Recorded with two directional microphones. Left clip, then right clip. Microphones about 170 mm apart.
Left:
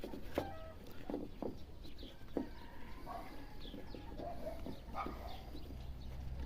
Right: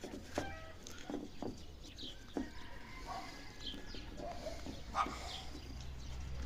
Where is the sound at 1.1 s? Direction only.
5° left (ahead or behind).